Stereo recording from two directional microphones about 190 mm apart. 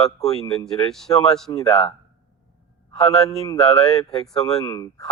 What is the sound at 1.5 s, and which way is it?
Speech, 20° left (ahead or behind).